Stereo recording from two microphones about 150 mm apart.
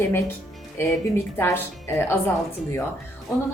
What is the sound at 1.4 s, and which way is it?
Speech, 15° left (ahead or behind).